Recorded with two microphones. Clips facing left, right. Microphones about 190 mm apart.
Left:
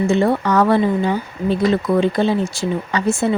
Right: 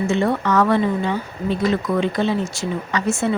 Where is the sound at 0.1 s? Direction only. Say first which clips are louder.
Left 3 dB; 35° left (ahead or behind).